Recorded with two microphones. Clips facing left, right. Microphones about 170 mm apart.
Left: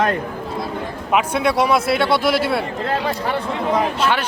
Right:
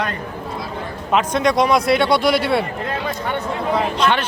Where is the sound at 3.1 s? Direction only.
30° left (ahead or behind).